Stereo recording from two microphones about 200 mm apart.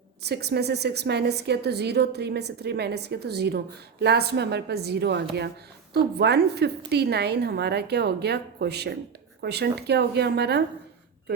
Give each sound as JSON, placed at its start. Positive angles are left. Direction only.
{"t": 0.2, "sound": "a woman's voice", "side_deg": -55}